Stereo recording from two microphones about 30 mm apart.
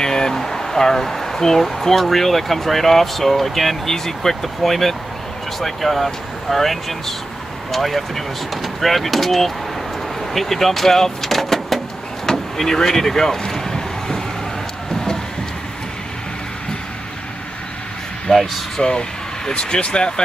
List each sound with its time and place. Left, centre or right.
0.0 s speech: left
12.3 s vehicle: centre
18.3 s speech: centre
18.8 s speech: left